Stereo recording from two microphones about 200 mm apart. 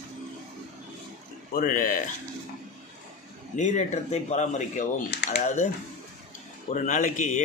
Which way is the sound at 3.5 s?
35° left (ahead or behind).